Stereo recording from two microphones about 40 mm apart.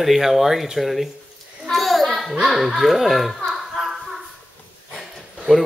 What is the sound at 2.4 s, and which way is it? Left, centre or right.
Speech, centre.